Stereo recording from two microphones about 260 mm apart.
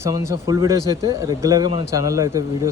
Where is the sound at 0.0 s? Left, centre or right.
Centre.